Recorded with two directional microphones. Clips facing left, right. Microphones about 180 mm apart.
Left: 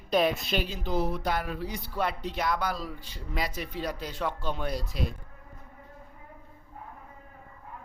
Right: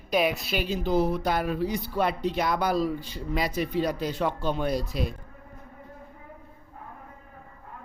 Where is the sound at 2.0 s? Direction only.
15° right (ahead or behind).